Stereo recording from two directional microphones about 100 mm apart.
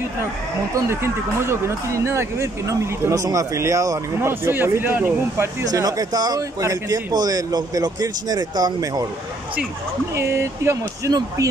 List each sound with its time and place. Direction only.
0.8 s speech: 25° right (ahead or behind)
4.3 s speech: 25° right (ahead or behind)
5.7 s speech: 40° right (ahead or behind)
10.1 s speech: 30° right (ahead or behind)